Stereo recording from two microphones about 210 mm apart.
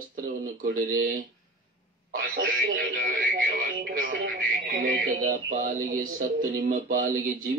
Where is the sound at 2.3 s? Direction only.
45° right (ahead or behind).